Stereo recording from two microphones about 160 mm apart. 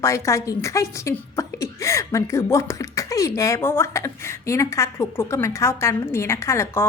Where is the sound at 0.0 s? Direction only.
20° left (ahead or behind).